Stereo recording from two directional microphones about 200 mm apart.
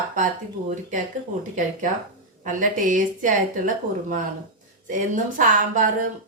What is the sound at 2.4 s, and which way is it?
A woman's voice, 40° right (ahead or behind).